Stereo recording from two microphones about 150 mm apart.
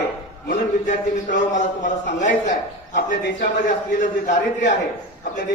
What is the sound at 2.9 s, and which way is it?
Speech, 90° left.